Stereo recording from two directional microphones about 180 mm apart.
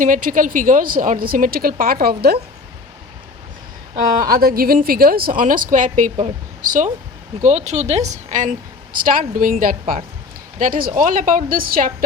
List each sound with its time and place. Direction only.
0.0 s speech: 50° right (ahead or behind)
3.9 s speech: 50° right (ahead or behind)